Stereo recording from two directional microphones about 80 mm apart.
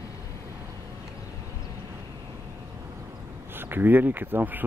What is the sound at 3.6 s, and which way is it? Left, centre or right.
Speech, right.